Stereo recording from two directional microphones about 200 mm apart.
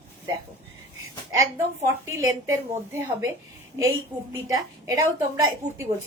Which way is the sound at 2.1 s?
15° right (ahead or behind).